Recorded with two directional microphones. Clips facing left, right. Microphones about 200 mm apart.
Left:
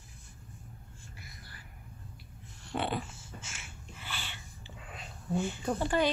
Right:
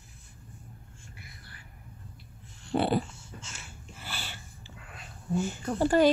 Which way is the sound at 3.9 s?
40° right (ahead or behind).